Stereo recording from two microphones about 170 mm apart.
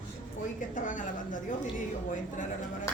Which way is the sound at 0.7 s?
50° left (ahead or behind).